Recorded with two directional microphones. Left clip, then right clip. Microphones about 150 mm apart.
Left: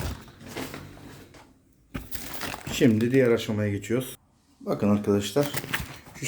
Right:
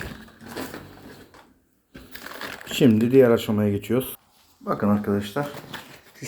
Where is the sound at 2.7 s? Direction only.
20° right (ahead or behind).